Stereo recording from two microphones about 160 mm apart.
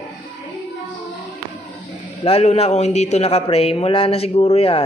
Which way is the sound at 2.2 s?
40° left (ahead or behind).